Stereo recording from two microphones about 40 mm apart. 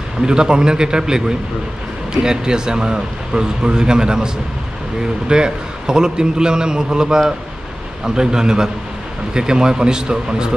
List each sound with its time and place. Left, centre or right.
0.2 s speech: centre
5.3 s a man's voice: centre